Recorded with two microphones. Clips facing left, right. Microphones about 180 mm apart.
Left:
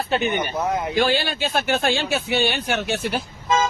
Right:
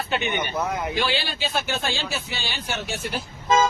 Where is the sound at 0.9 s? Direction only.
45° left (ahead or behind); by 3.2 s 65° left (ahead or behind).